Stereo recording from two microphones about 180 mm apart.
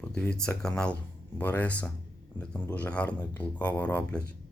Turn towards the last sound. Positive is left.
turn(degrees=10)  # may be behind; listen again after turning